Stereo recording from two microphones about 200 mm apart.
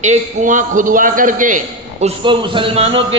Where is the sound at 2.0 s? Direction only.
25° right (ahead or behind).